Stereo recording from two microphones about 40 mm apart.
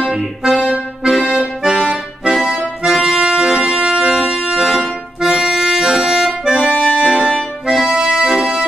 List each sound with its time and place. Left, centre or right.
0.0 s accordion: centre
8.3 s music: centre